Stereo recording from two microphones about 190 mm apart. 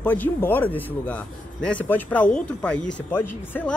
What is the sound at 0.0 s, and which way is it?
Speech, 10° left (ahead or behind).